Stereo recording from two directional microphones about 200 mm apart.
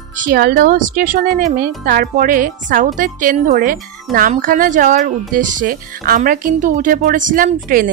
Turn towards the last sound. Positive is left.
turn(degrees=-45)  # may be behind; listen again after turning